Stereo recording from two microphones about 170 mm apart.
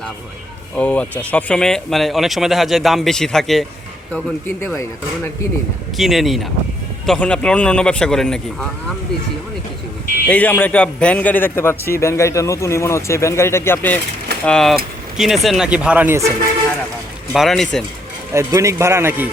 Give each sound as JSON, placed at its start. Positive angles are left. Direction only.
{"t": 0.8, "sound": "speech", "side_deg": 10}
{"t": 6.0, "sound": "speech", "side_deg": 0}
{"t": 10.2, "sound": "speech", "side_deg": 10}
{"t": 17.3, "sound": "speech", "side_deg": 0}
{"t": 18.3, "sound": "speech", "side_deg": -15}